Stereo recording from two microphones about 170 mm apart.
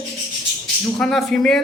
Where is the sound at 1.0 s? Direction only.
Centre (ahead or behind).